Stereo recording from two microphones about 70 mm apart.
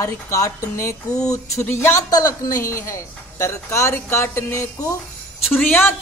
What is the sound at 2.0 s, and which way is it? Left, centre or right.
Speech, left.